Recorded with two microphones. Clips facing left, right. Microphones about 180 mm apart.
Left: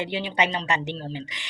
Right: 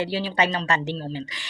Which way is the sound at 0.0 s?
20° left (ahead or behind).